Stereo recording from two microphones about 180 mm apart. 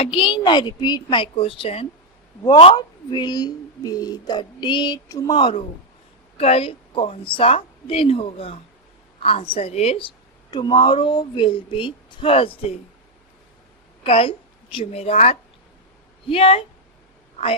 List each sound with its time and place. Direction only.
0.0 s a woman's voice: 30° left (ahead or behind)
14.0 s a woman's voice: 30° left (ahead or behind)